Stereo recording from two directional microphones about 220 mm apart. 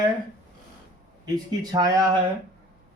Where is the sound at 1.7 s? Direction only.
15° right (ahead or behind).